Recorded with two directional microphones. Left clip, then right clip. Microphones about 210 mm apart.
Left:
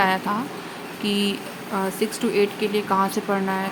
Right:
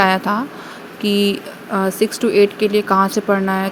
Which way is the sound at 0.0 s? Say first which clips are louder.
Right 6 dB; 25° right (ahead or behind).